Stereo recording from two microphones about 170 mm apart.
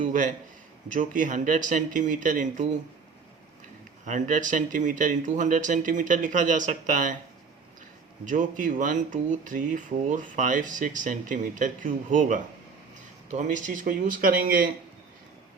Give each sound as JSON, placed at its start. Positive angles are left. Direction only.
{"t": 0.0, "sound": "a man's voice", "side_deg": -50}
{"t": 4.0, "sound": "speech", "side_deg": -50}
{"t": 8.2, "sound": "speech", "side_deg": -50}